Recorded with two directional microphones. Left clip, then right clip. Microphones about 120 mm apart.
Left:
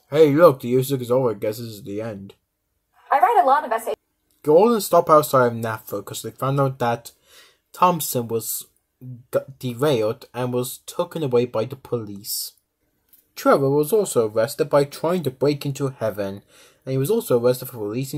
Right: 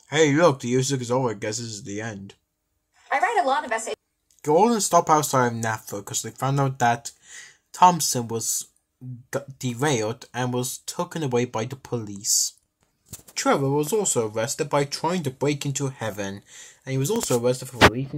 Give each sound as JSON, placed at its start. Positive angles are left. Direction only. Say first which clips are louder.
{"t": 0.1, "sound": "speech", "louder": "left 5 dB", "side_deg": 5}
{"t": 3.5, "sound": "a woman's voice", "louder": "left 5 dB", "side_deg": 0}
{"t": 13.3, "sound": "speech", "louder": "left 5 dB", "side_deg": 15}